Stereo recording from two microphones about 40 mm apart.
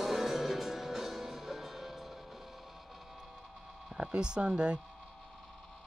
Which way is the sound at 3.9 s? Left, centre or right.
Right.